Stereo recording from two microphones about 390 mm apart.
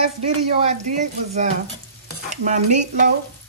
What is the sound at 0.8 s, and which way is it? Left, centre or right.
Frying, centre.